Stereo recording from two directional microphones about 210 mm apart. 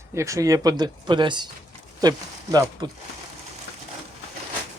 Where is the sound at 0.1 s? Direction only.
15° right (ahead or behind).